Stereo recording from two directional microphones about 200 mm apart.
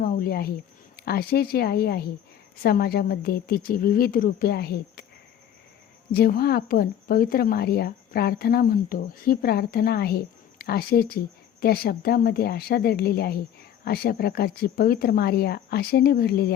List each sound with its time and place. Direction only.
0.0 s a sound: 50° left (ahead or behind)
0.9 s speech: 50° left (ahead or behind)
6.1 s speech: 50° left (ahead or behind)